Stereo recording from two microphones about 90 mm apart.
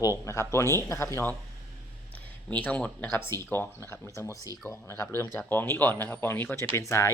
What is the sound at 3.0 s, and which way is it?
Speech, 25° left (ahead or behind).